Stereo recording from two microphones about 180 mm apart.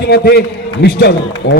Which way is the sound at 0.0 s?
65° left (ahead or behind).